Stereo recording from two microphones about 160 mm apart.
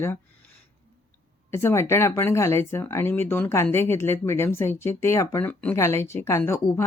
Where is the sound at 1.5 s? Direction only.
15° left (ahead or behind).